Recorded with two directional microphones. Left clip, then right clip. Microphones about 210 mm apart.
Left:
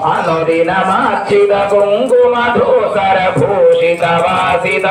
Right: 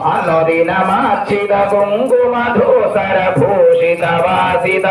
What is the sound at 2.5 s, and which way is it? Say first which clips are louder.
A man's voice: even; 50° left (ahead or behind).